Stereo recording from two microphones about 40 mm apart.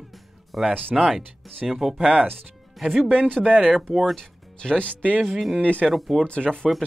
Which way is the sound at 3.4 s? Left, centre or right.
Right.